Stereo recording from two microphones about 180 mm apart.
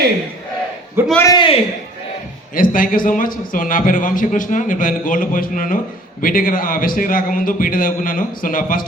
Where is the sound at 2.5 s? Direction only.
50° left (ahead or behind).